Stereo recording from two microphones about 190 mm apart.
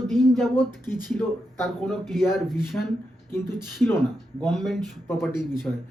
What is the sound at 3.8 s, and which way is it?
Speech, centre (ahead or behind).